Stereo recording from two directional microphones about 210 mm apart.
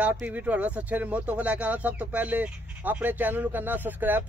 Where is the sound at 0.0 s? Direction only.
10° right (ahead or behind).